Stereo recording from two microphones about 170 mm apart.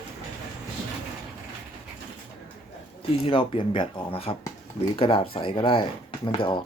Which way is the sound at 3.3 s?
30° left (ahead or behind).